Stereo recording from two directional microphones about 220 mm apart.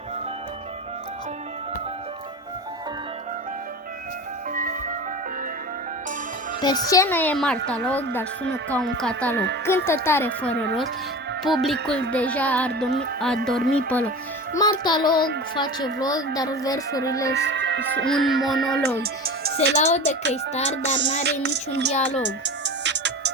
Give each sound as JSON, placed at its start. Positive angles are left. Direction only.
{"t": 4.5, "sound": "music", "side_deg": -40}
{"t": 6.6, "sound": "speech", "side_deg": 20}
{"t": 14.5, "sound": "music", "side_deg": 20}
{"t": 15.5, "sound": "speech", "side_deg": 20}
{"t": 17.2, "sound": "speech", "side_deg": -55}
{"t": 18.1, "sound": "speech", "side_deg": 0}
{"t": 18.9, "sound": "music", "side_deg": -45}
{"t": 19.7, "sound": "speech", "side_deg": 30}
{"t": 20.3, "sound": "music", "side_deg": 30}
{"t": 21.2, "sound": "music", "side_deg": -50}